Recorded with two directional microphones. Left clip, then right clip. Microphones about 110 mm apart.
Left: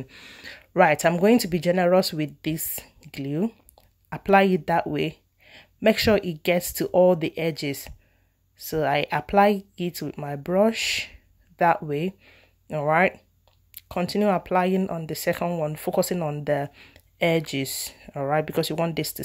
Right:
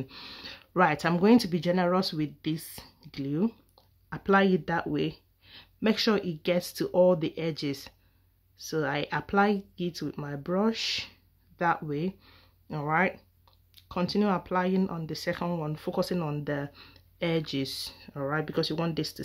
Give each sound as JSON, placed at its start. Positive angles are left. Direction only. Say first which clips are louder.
{"t": 0.0, "sound": "speech", "louder": "even", "side_deg": -5}
{"t": 0.5, "sound": "speech", "louder": "left 6 dB", "side_deg": 20}
{"t": 12.2, "sound": "speech", "louder": "left 4 dB", "side_deg": 5}
{"t": 12.8, "sound": "speech", "louder": "left 6 dB", "side_deg": 30}
{"t": 15.4, "sound": "speech", "louder": "left 7 dB", "side_deg": 15}
{"t": 16.2, "sound": "speech", "louder": "left 5 dB", "side_deg": 15}
{"t": 16.4, "sound": "speech", "louder": "left 8 dB", "side_deg": 30}